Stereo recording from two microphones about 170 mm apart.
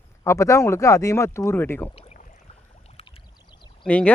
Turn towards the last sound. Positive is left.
turn(degrees=5)  # may be behind; listen again after turning